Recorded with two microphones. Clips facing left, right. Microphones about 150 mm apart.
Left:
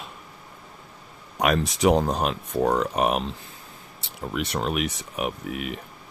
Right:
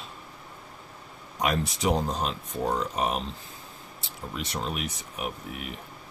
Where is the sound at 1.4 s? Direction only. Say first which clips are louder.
Left 6 dB; 75° left (ahead or behind).